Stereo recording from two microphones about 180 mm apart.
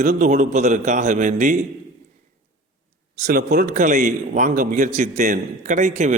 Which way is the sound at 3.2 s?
60° right (ahead or behind).